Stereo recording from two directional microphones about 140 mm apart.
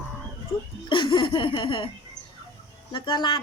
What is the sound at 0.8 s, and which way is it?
A woman's voice, 35° left (ahead or behind).